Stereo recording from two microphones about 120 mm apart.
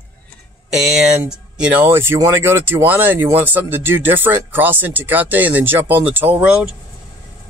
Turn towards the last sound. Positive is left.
turn(degrees=-15)  # may be behind; listen again after turning